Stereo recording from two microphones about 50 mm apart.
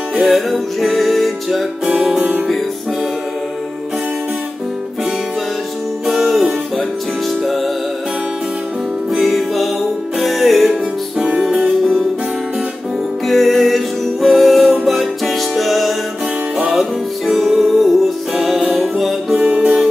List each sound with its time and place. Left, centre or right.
0.2 s music: centre
6.0 s music: centre
7.4 s music: centre
9.1 s music: centre
13.3 s music: centre
19.5 s music: centre